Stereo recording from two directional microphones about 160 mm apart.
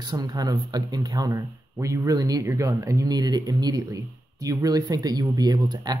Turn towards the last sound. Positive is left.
turn(degrees=-25)  # may be behind; listen again after turning